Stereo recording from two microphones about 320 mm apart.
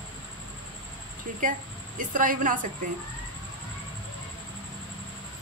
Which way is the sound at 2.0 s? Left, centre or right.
Right.